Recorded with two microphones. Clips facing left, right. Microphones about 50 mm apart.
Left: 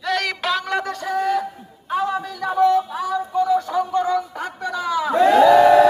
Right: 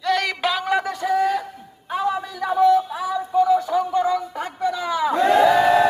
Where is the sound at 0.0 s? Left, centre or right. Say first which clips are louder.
Right 1 dB; centre.